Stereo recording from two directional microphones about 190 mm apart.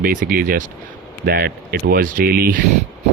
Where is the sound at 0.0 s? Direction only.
45° right (ahead or behind).